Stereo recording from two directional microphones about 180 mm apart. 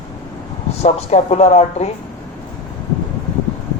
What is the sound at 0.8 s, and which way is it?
Speech, 35° left (ahead or behind).